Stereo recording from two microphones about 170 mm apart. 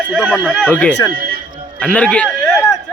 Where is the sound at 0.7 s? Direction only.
10° left (ahead or behind).